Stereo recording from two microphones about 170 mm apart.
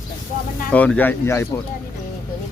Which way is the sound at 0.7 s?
10° left (ahead or behind).